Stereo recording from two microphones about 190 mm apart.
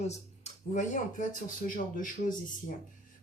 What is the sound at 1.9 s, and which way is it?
Speech, 45° left (ahead or behind).